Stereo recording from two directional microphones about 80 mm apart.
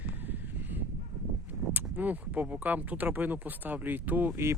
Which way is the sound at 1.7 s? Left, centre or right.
Centre.